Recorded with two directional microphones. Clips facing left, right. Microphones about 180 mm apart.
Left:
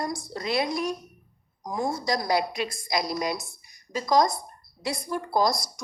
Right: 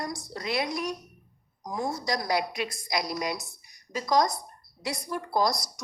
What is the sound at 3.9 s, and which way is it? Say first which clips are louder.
A woman's voice: left 2 dB; 30° left (ahead or behind).